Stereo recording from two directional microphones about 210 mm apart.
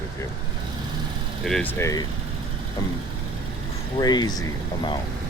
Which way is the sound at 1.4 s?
Centre (ahead or behind).